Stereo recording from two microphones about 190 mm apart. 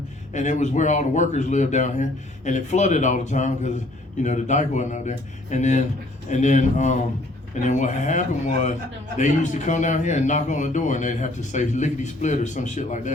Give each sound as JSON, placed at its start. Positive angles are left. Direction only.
{"t": 0.3, "sound": "a man's voice", "side_deg": 40}